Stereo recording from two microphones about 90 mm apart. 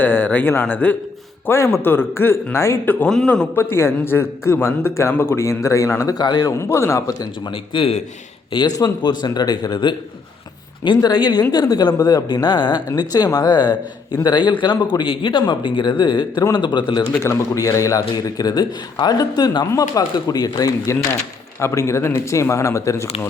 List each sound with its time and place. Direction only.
0.0 s a man's voice: 20° left (ahead or behind)
1.5 s a man's voice: 30° left (ahead or behind)
3.1 s a man's voice: 5° left (ahead or behind)
3.5 s a man's voice: 25° left (ahead or behind)
6.1 s speech: 50° left (ahead or behind)
6.6 s speech: 30° left (ahead or behind)
7.4 s a man's voice: 70° left (ahead or behind)
8.5 s a man's voice: 55° left (ahead or behind)
17.2 s speech: 35° left (ahead or behind)
18.1 s speech: 50° left (ahead or behind)
21.6 s speech: 30° left (ahead or behind)